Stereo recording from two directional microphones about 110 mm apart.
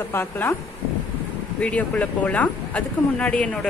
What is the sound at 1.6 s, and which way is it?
Speech, 10° left (ahead or behind).